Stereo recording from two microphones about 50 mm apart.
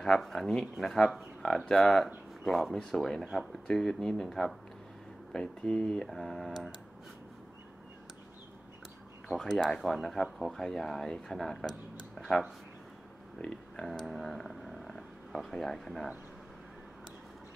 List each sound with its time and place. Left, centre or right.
0.0 s speech: centre
9.7 s speech: centre; by 13.5 s left
13.8 s speech: centre